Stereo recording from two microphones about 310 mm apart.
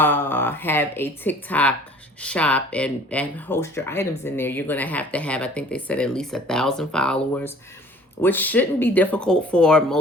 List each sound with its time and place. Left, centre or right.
0.0 s speech: centre